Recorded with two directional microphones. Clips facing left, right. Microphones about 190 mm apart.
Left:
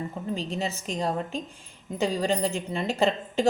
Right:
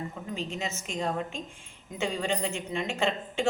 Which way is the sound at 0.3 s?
35° left (ahead or behind).